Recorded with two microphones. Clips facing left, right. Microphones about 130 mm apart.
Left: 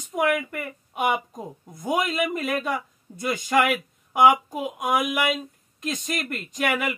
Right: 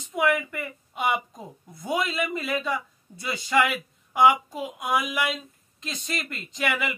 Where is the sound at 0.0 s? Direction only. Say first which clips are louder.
Left 1 dB; 45° left (ahead or behind).